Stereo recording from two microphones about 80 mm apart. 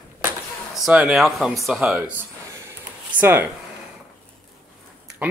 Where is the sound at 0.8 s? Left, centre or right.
Centre.